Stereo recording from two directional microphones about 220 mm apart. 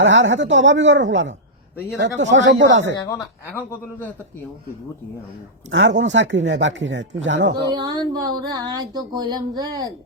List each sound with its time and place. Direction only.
0.0 s speech: 55° right (ahead or behind)
3.2 s a man's voice: 10° left (ahead or behind)
5.7 s speech: 55° right (ahead or behind)
7.7 s speech: 20° right (ahead or behind)